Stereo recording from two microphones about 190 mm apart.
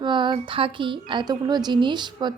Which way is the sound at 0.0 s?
25° right (ahead or behind).